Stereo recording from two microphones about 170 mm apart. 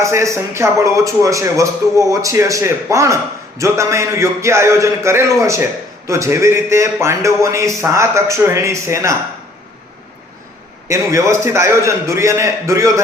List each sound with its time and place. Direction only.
0.0 s a man's voice: 15° right (ahead or behind)
10.8 s a man's voice: 15° right (ahead or behind)